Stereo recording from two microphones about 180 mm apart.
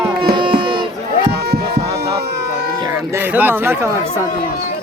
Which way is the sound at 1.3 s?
65° right (ahead or behind).